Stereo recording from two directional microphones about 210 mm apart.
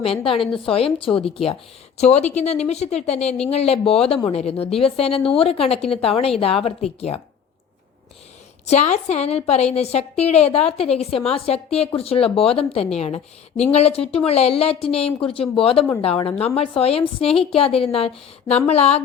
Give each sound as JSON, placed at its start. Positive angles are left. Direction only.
{"t": 0.0, "sound": "a woman's voice", "side_deg": 25}
{"t": 8.6, "sound": "a woman's voice", "side_deg": 30}